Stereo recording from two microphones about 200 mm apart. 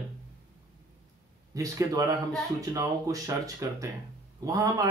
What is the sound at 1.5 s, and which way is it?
Speech, 15° right (ahead or behind).